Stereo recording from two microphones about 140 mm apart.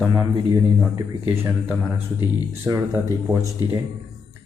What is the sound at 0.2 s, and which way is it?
Speech, 20° right (ahead or behind).